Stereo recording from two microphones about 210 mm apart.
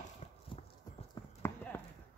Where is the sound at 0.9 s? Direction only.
15° left (ahead or behind).